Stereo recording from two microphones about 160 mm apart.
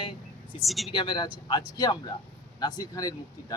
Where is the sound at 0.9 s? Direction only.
30° left (ahead or behind).